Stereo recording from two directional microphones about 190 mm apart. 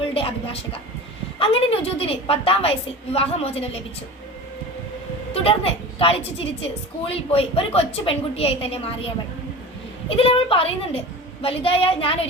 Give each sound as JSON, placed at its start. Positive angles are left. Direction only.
{"t": 0.0, "sound": "a woman's voice", "side_deg": 30}
{"t": 5.3, "sound": "a woman's voice", "side_deg": 30}
{"t": 10.1, "sound": "a woman's voice", "side_deg": 30}